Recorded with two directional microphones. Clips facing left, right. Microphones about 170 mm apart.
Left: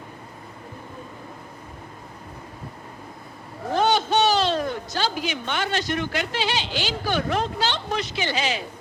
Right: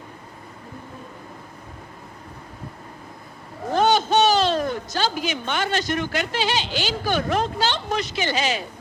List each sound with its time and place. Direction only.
3.8 s speech: 45° right (ahead or behind)